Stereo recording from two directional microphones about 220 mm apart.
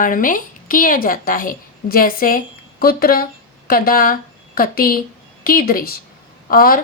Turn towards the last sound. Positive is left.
turn(degrees=40)  # may be behind; listen again after turning